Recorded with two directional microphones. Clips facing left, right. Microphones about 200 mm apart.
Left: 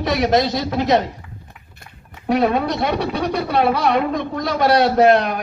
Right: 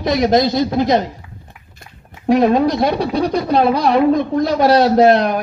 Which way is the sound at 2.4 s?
35° right (ahead or behind).